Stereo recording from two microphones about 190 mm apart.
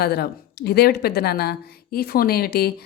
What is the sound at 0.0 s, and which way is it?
A woman's voice, 60° left (ahead or behind).